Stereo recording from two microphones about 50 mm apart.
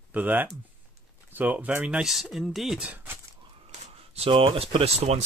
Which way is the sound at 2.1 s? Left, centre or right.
Centre.